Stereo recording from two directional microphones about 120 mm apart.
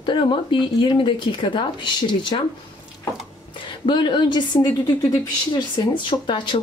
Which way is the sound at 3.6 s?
40° left (ahead or behind).